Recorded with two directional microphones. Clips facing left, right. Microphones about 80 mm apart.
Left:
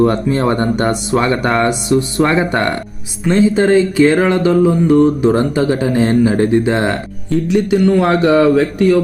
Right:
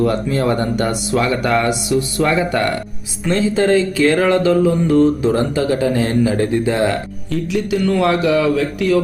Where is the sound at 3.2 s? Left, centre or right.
Centre.